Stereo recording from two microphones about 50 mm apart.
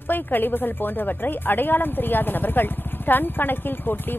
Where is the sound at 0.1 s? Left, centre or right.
Left.